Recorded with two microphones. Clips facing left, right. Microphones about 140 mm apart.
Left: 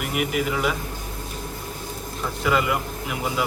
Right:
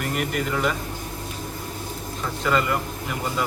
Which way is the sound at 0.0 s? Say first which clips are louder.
Left 1 dB; 5° left (ahead or behind).